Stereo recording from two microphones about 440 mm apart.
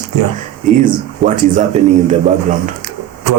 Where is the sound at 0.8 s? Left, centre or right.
Centre.